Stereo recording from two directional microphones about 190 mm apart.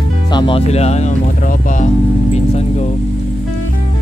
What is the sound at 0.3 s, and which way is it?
Speech, 25° left (ahead or behind).